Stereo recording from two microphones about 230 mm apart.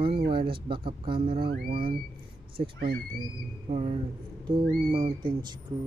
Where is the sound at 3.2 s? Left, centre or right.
Right.